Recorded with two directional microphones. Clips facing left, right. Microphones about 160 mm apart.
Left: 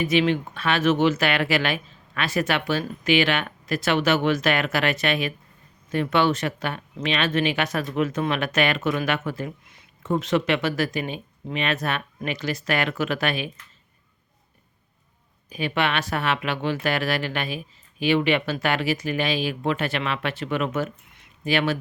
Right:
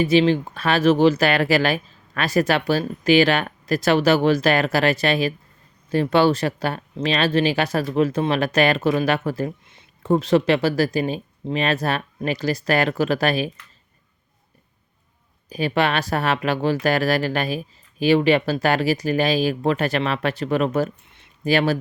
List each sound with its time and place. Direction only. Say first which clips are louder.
0.0 s speech: right 4 dB; 30° right (ahead or behind)
15.4 s speech: right 4 dB; 35° right (ahead or behind)